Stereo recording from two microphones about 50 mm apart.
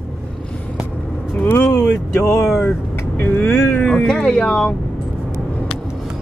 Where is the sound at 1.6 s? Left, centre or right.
Left.